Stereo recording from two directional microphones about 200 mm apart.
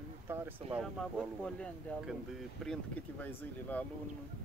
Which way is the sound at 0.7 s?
Centre (ahead or behind).